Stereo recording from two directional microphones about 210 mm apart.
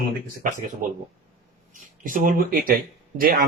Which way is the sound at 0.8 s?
35° right (ahead or behind).